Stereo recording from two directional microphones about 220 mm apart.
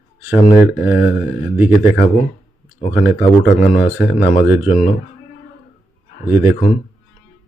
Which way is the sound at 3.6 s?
40° left (ahead or behind).